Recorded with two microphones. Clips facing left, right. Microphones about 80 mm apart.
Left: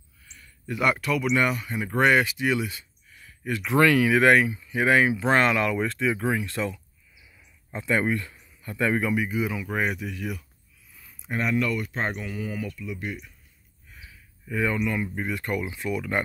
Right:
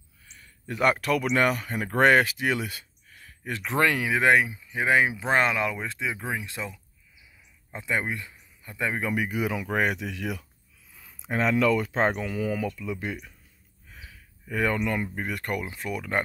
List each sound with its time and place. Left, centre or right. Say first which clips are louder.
0.3 s speech: left 2 dB; right; by 9.0 s centre
9.1 s speech: left 1 dB; right
11.0 s a sound: right 2 dB; right
12.3 s speech: right 4 dB; right
13.9 s a sound: right 1 dB; right
15.1 s speech: left 2 dB; right